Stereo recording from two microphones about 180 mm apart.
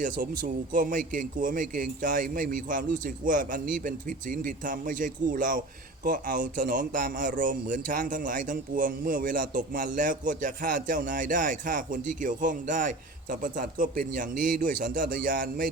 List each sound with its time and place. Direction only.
0.0 s a man's voice: 45° right (ahead or behind)